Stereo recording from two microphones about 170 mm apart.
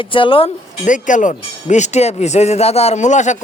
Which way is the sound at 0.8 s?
50° left (ahead or behind).